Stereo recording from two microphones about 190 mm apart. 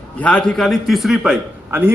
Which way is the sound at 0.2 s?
5° left (ahead or behind).